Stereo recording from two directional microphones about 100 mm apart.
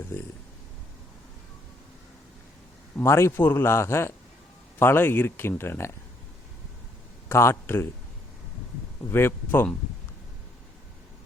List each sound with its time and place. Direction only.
0.1 s a sound: 25° left (ahead or behind)
3.0 s speech: 25° left (ahead or behind)
7.3 s speech: 25° left (ahead or behind)
9.0 s speech: 25° left (ahead or behind)